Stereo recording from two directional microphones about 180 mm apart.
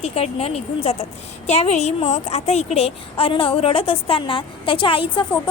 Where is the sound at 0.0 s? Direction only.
35° left (ahead or behind).